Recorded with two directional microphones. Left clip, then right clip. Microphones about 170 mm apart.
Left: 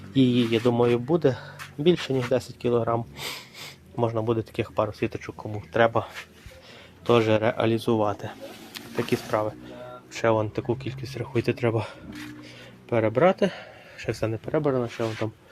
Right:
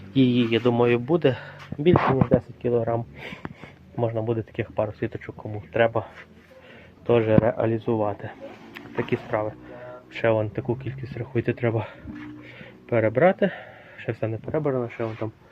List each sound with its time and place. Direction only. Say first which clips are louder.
0.1 s speech: right 1 dB; 20° left (ahead or behind)
7.1 s speech: right 1 dB; 25° left (ahead or behind)
10.2 s a man's voice: right 1 dB; 15° left (ahead or behind)
14.4 s speech: left 1 dB; 45° left (ahead or behind)